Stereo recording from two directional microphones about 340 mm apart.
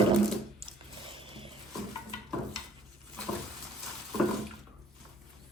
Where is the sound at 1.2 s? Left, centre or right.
Centre.